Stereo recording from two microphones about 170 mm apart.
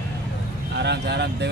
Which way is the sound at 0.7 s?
85° right.